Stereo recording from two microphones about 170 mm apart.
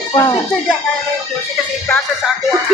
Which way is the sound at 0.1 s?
25° left (ahead or behind).